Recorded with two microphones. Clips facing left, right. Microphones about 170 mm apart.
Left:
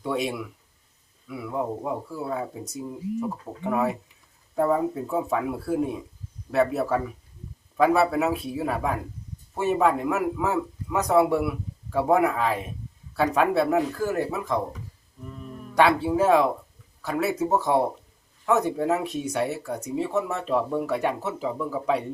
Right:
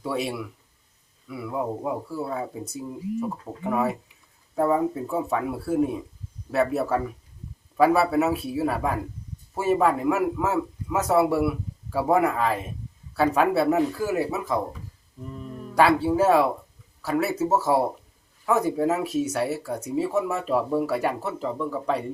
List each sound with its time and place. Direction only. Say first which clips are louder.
0.0 s speech: left 1 dB; centre (ahead or behind)
15.7 s speech: right 1 dB; 5° right (ahead or behind)